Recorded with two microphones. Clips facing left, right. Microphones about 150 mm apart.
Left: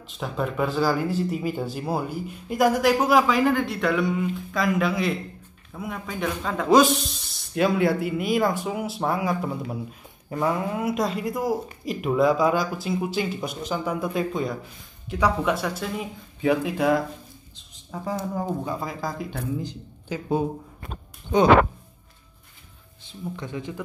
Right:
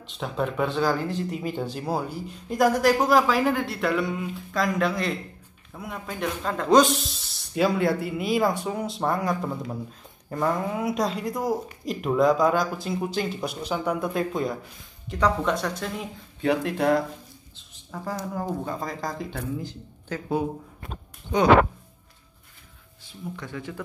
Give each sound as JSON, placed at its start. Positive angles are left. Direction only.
{"t": 0.0, "sound": "speech", "side_deg": 0}
{"t": 19.6, "sound": "speech", "side_deg": 15}
{"t": 23.0, "sound": "speech", "side_deg": 20}